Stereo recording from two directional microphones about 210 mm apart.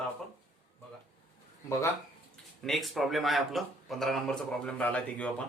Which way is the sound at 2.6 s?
Centre (ahead or behind).